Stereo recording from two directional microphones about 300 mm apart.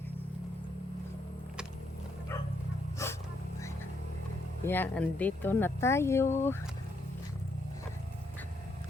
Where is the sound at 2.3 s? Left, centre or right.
Centre.